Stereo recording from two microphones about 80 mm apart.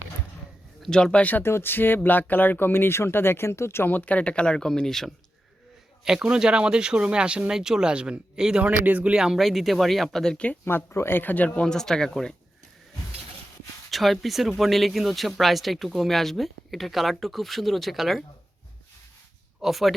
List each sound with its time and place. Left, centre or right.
0.8 s speech: centre
1.2 s speech: left; by 5.1 s centre
6.1 s speech: centre
9.2 s speech: centre
10.7 s speech: left; by 12.3 s centre
13.9 s speech: centre
19.6 s speech: centre